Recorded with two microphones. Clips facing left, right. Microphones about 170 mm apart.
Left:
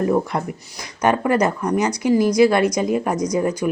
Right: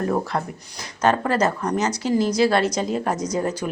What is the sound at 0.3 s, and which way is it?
Speech, 15° left (ahead or behind).